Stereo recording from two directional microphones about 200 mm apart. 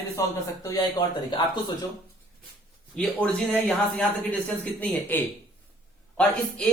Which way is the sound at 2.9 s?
5° left (ahead or behind).